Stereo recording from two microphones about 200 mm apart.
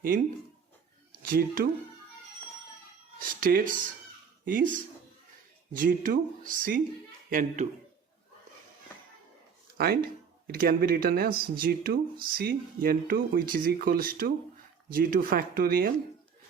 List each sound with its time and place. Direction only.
1.2 s speech: 45° right (ahead or behind)
3.2 s speech: 45° right (ahead or behind)
9.7 s speech: 50° right (ahead or behind)